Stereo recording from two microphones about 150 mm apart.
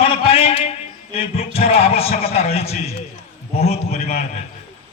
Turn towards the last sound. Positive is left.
turn(degrees=45)  # may be behind; listen again after turning